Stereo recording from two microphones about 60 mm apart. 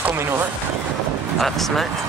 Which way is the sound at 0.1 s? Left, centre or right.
Right.